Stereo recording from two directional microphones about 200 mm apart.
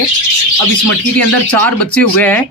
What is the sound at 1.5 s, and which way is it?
Speech, 5° left (ahead or behind).